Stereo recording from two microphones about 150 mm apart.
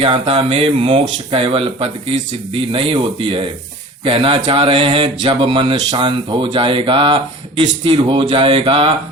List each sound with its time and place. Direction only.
0.0 s speech: 35° right (ahead or behind)